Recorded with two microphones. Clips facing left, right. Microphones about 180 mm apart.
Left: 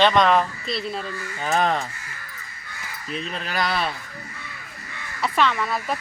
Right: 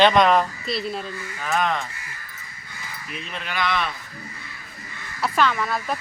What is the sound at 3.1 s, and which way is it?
Speech, 35° left (ahead or behind).